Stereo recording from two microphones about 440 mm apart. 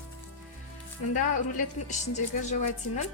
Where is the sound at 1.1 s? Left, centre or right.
Centre.